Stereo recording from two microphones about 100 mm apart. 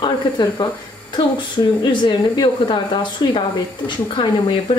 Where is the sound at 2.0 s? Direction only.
45° left (ahead or behind).